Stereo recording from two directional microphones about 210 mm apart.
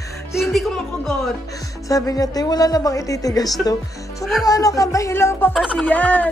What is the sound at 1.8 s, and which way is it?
Speech, 15° left (ahead or behind).